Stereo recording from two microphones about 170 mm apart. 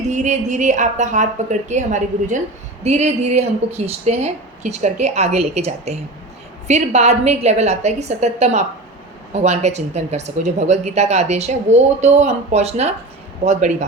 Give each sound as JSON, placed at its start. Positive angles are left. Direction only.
{"t": 0.1, "sound": "a woman's voice", "side_deg": -45}